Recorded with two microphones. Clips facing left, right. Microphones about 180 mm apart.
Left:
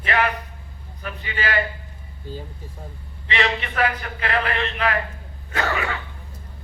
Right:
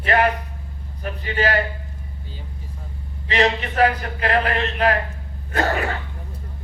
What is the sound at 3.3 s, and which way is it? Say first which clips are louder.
A man's voice: right 4 dB; 40° right (ahead or behind).